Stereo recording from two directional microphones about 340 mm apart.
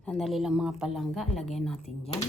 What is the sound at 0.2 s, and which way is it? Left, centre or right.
A woman's voice, centre.